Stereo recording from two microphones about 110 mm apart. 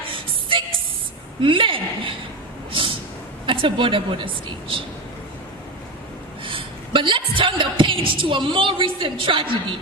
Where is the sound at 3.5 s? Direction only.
50° right (ahead or behind).